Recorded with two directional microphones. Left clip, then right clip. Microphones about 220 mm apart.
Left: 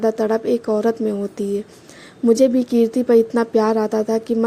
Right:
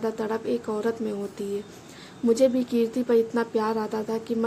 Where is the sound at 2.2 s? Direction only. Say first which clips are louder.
Left 6 dB; 25° left (ahead or behind).